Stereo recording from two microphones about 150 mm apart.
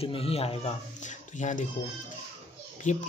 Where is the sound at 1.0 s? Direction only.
55° left (ahead or behind).